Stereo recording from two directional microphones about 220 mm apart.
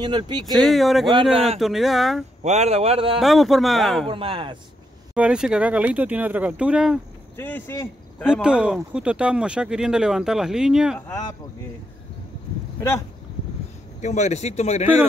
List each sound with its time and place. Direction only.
0.0 s speech: 20° right (ahead or behind)
0.5 s speech: centre (ahead or behind)
2.4 s speech: 30° right (ahead or behind)
3.2 s speech: centre (ahead or behind)
4.1 s speech: 25° right (ahead or behind)
5.1 s speech: 5° right (ahead or behind)
7.3 s a man's voice: 10° left (ahead or behind)
8.3 s speech: 5° right (ahead or behind)
11.1 s speech: 15° left (ahead or behind)
14.0 s speech: 30° left (ahead or behind)